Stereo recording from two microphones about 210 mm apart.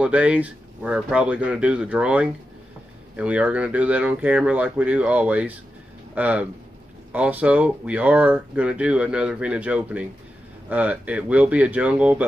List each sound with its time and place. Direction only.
0.0 s speech: 5° right (ahead or behind)